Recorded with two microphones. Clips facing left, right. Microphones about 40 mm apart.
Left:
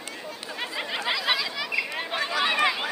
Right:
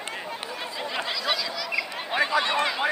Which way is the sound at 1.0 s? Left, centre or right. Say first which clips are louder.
Left 4 dB; centre.